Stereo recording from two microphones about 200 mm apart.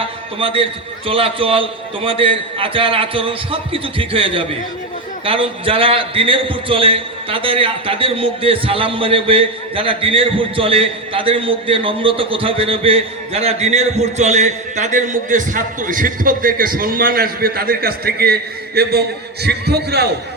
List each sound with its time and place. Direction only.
0.3 s a man's voice: 25° right (ahead or behind); by 20.1 s 55° right (ahead or behind)